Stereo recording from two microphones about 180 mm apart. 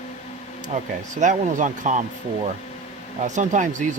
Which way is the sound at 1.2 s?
45° right (ahead or behind).